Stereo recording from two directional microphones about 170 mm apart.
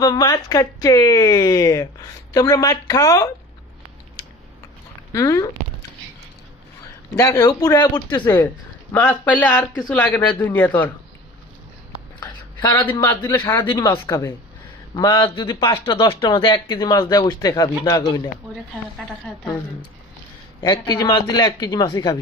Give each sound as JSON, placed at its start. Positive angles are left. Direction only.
{"t": 0.0, "sound": "a man's voice", "side_deg": 20}
{"t": 5.1, "sound": "a man's voice", "side_deg": 20}
{"t": 7.2, "sound": "a man's voice", "side_deg": 20}
{"t": 12.2, "sound": "a sound", "side_deg": 25}
{"t": 12.9, "sound": "a woman's voice", "side_deg": 15}
{"t": 20.6, "sound": "a man's voice", "side_deg": 25}